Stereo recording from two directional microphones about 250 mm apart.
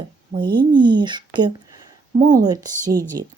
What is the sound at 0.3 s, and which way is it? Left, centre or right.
Speech, centre.